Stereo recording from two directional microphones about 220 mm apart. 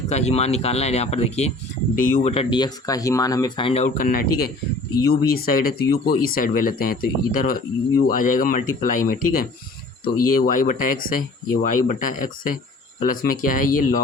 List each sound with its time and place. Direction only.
0.1 s speech: 30° left (ahead or behind)